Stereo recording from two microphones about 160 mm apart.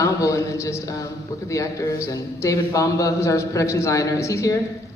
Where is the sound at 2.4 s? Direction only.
20° left (ahead or behind).